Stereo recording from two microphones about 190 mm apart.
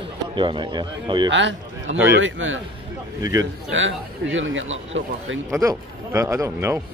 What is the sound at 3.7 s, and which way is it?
Speech, 80° right.